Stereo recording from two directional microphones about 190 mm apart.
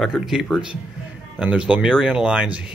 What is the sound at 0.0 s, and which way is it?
Speech, centre (ahead or behind).